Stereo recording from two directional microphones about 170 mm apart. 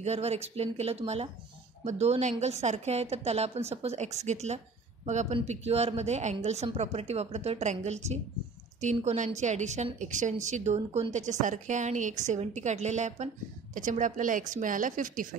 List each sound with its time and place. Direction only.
0.0 s a woman's voice: 40° right (ahead or behind)